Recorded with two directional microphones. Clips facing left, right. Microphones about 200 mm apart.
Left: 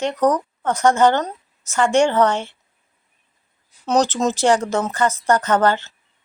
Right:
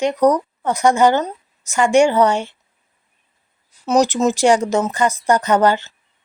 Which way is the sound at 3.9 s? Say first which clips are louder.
Right 3 dB; 10° right (ahead or behind).